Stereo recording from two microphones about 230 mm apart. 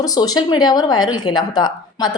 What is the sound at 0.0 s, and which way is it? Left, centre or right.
A woman's voice, centre.